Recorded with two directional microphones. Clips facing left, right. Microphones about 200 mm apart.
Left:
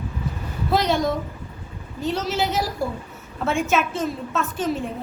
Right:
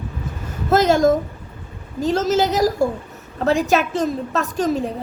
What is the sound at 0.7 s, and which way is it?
A woman's voice, 45° right (ahead or behind).